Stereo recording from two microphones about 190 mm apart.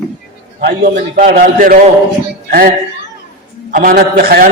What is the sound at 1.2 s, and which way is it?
Speech, 50° right (ahead or behind).